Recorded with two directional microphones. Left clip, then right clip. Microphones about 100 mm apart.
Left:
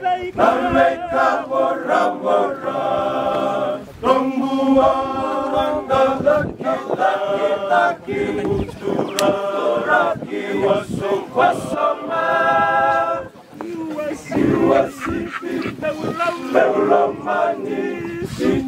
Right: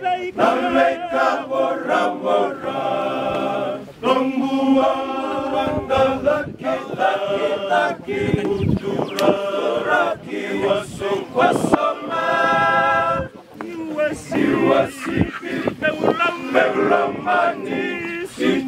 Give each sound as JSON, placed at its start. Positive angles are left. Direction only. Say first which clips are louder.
{"t": 0.0, "sound": "chant", "louder": "left 2 dB", "side_deg": 0}
{"t": 4.6, "sound": "chant", "louder": "left 3 dB", "side_deg": 10}
{"t": 9.2, "sound": "choir", "louder": "even", "side_deg": -5}
{"t": 14.3, "sound": "a sound", "louder": "left 2 dB", "side_deg": -30}